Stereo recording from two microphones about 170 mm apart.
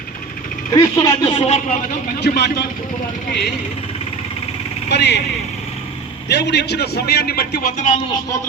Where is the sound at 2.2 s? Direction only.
75° left (ahead or behind).